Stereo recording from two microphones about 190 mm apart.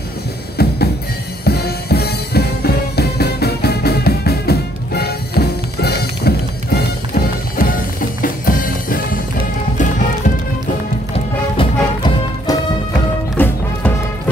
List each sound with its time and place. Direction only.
0.6 s drum: 55° left (ahead or behind)
1.4 s music: 55° left (ahead or behind)
11.5 s music: 20° left (ahead or behind)
13.4 s music: 10° left (ahead or behind)